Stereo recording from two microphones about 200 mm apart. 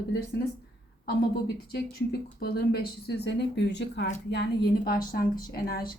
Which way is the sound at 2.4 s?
55° left (ahead or behind).